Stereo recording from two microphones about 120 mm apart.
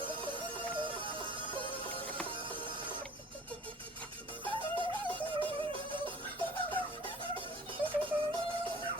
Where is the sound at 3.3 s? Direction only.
15° left (ahead or behind).